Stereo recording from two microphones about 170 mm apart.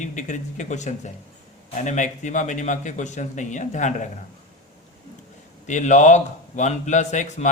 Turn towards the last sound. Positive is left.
turn(degrees=45)  # may be behind; listen again after turning